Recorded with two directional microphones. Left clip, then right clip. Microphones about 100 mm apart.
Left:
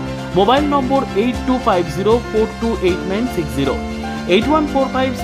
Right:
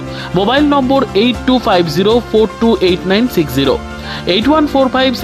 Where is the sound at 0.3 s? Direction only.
75° right (ahead or behind).